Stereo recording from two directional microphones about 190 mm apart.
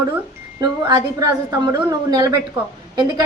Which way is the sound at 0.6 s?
20° right (ahead or behind).